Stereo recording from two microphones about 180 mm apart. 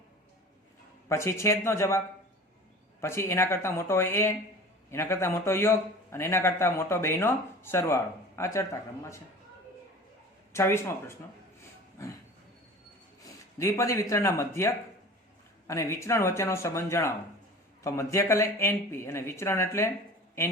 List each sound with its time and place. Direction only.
1.0 s a man's voice: 15° left (ahead or behind)
3.0 s a man's voice: 15° left (ahead or behind)
10.5 s a man's voice: 15° left (ahead or behind)
13.2 s a man's voice: 15° left (ahead or behind)